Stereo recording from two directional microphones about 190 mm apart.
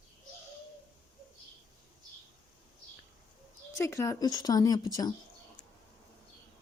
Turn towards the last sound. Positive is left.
turn(degrees=20)  # may be behind; listen again after turning